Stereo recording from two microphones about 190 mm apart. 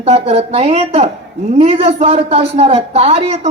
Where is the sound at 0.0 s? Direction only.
35° right (ahead or behind).